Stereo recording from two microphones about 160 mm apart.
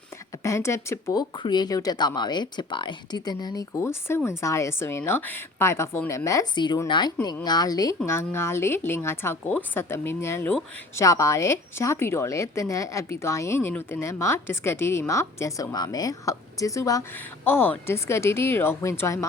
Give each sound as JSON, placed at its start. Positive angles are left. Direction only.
{"t": 0.4, "sound": "a woman's voice", "side_deg": 20}